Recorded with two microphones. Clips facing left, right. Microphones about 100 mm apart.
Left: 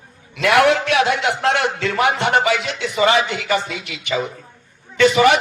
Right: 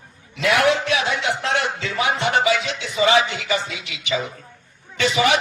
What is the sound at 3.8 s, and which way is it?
A man's voice, 50° left (ahead or behind).